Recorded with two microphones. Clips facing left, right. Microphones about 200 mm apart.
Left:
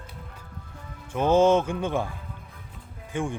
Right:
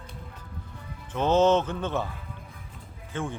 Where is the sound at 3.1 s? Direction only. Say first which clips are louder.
Left 3 dB; 15° left (ahead or behind).